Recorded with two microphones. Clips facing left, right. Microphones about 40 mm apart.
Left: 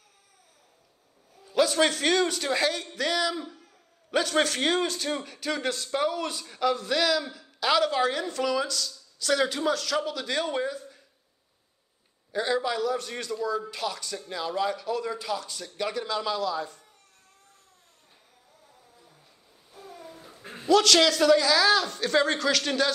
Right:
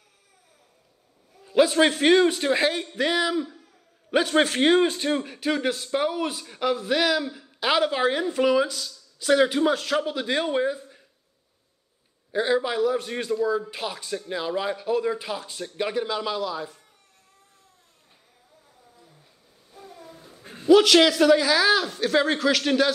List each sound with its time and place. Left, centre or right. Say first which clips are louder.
1.4 s a man's voice: right 4 dB; right
12.3 s a man's voice: right 3 dB; centre
19.7 s a sound: even; centre
20.6 s a man's voice: right 4 dB; centre